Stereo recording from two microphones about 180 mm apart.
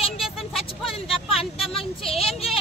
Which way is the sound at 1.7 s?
Centre (ahead or behind).